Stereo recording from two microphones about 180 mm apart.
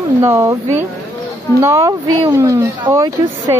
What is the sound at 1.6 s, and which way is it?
Speech, 15° right (ahead or behind).